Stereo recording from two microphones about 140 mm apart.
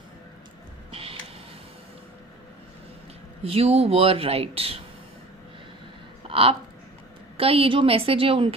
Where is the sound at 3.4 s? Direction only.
45° right (ahead or behind).